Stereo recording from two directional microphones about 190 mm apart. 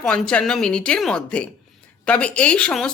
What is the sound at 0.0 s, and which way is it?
Speech, 5° left (ahead or behind).